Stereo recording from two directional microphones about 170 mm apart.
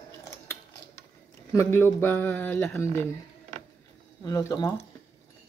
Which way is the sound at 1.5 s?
15° left (ahead or behind).